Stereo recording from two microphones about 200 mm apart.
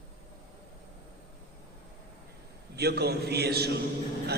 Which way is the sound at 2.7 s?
55° right (ahead or behind).